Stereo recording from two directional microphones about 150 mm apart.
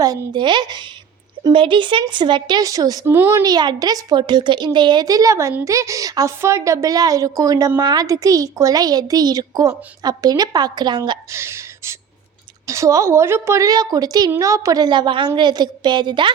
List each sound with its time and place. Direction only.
0.0 s a woman's voice: 25° right (ahead or behind)
3.4 s speech: 30° right (ahead or behind)
11.3 s a woman's voice: 15° right (ahead or behind)